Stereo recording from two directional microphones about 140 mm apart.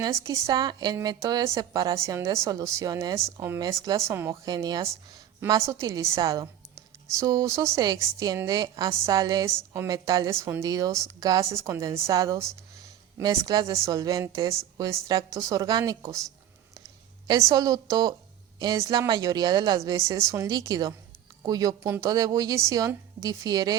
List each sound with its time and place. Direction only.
0.0 s a woman's voice: 25° right (ahead or behind)
17.2 s a woman's voice: 25° right (ahead or behind)